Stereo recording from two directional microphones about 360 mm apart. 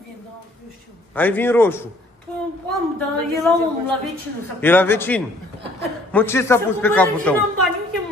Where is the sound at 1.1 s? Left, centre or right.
Centre.